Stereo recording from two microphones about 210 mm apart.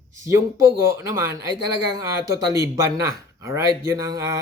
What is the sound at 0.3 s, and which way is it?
Speech, 15° right (ahead or behind).